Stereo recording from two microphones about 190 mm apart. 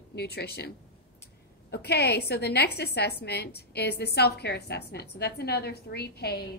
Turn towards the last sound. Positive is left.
turn(degrees=60)  # may be behind; listen again after turning